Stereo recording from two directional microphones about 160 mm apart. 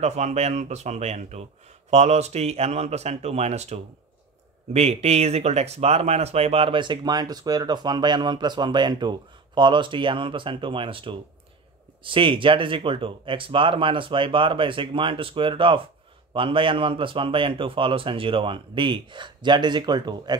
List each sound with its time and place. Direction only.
0.0 s a man's voice: 45° right (ahead or behind); by 20.3 s 25° right (ahead or behind)